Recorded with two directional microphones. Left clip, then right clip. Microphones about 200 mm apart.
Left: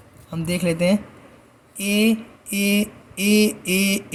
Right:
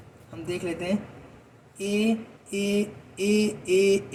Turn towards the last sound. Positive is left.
turn(degrees=40)  # may be behind; listen again after turning